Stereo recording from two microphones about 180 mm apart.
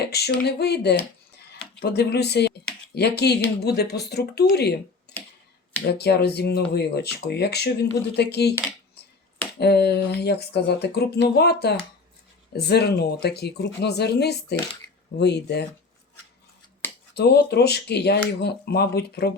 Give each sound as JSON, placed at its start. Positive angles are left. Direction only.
{"t": 0.0, "sound": "speech", "side_deg": 65}
{"t": 5.9, "sound": "speech", "side_deg": 65}
{"t": 9.6, "sound": "speech", "side_deg": 65}
{"t": 16.8, "sound": "scissors", "side_deg": 10}
{"t": 17.2, "sound": "speech", "side_deg": 65}